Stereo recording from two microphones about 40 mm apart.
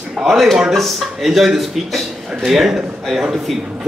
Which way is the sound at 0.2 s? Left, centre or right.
Centre.